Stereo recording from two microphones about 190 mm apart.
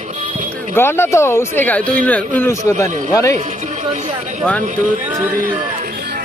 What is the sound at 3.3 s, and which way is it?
Speech, 40° right (ahead or behind).